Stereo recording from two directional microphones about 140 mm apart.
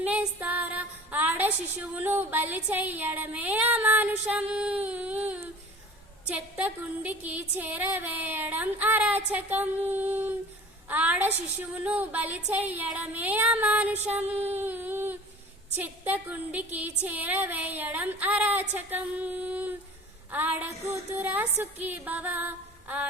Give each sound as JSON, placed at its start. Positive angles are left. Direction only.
{"t": 0.0, "sound": "a woman's voice", "side_deg": -10}
{"t": 6.3, "sound": "a woman's voice", "side_deg": -10}
{"t": 14.3, "sound": "speech", "side_deg": -50}
{"t": 14.5, "sound": "a sound", "side_deg": -15}
{"t": 15.7, "sound": "a woman's voice", "side_deg": -15}